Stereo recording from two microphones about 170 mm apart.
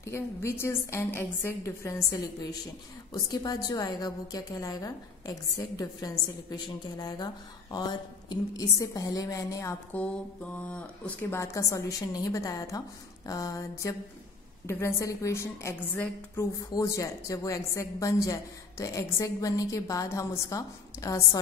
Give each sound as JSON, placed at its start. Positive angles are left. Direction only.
{"t": 0.0, "sound": "a woman's voice", "side_deg": 15}